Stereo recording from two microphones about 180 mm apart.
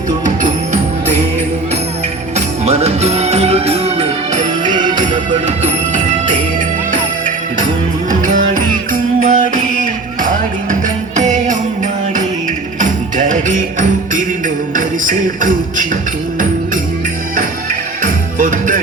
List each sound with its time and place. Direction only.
2.3 s music: 35° right (ahead or behind)
4.7 s music: 25° right (ahead or behind)
5.5 s music: 40° right (ahead or behind)
8.1 s music: 45° right (ahead or behind)
10.7 s music: 45° right (ahead or behind)
12.8 s music: 45° right (ahead or behind)
17.3 s music: 45° right (ahead or behind)